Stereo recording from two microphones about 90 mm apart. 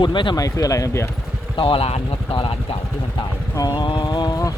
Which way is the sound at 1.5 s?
75° left (ahead or behind).